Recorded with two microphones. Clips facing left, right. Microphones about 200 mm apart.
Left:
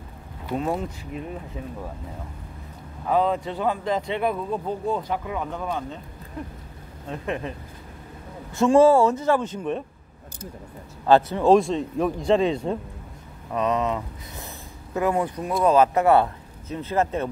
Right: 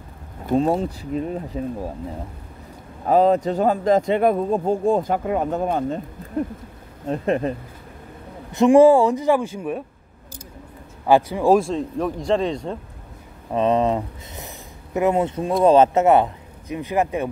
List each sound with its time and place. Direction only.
0.6 s speech: 30° right (ahead or behind)
3.1 s speech: 40° right (ahead or behind)
7.1 s speech: 40° right (ahead or behind)
8.5 s speech: 20° right (ahead or behind)
11.1 s speech: 10° right (ahead or behind); by 12.7 s 5° left (ahead or behind)
13.5 s speech: 30° right (ahead or behind)
15.0 s speech: 20° right (ahead or behind)